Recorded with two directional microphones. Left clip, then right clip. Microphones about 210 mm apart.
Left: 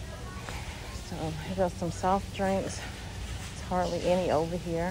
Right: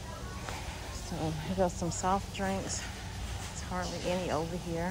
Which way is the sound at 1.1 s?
20° right (ahead or behind).